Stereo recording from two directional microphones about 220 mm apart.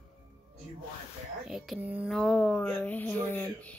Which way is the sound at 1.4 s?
5° right (ahead or behind).